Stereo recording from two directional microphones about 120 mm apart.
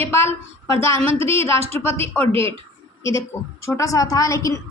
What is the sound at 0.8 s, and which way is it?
A woman's voice, 20° left (ahead or behind).